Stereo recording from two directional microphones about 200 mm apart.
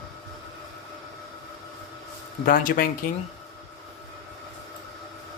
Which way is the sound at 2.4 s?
45° left (ahead or behind).